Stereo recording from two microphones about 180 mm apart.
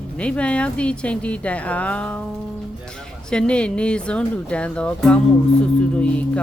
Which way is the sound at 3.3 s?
5° left (ahead or behind).